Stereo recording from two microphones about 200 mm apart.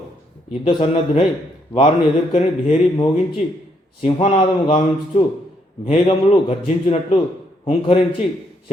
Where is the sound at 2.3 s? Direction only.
30° left (ahead or behind).